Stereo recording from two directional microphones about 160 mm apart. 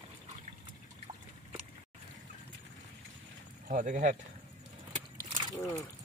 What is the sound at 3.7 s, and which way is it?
Speech, 55° right (ahead or behind).